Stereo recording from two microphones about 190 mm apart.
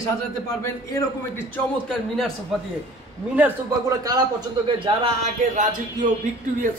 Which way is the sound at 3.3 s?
15° right (ahead or behind).